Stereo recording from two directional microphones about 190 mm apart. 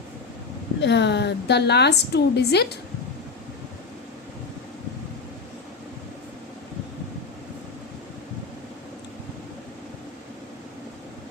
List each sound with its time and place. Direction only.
0.8 s a woman's voice: 65° left (ahead or behind)